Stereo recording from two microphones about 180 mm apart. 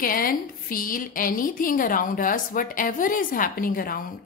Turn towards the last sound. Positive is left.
turn(degrees=50)  # may be behind; listen again after turning